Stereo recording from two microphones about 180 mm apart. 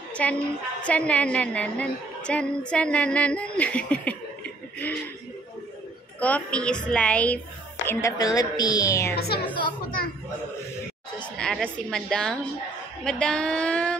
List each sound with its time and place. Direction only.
0.1 s a woman's voice: 5° left (ahead or behind)
6.1 s a woman's voice: 10° left (ahead or behind)
9.1 s a woman's voice: 65° left (ahead or behind)
9.4 s a woman's voice: 25° left (ahead or behind)
11.1 s a woman's voice: 5° left (ahead or behind)